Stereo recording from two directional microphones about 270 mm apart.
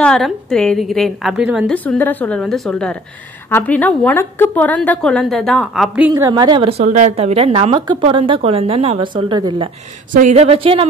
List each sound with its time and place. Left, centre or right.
0.0 s a woman's voice: centre; by 10.9 s right